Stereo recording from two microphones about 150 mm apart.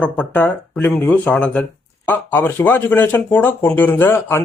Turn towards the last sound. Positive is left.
turn(degrees=15)  # may be behind; listen again after turning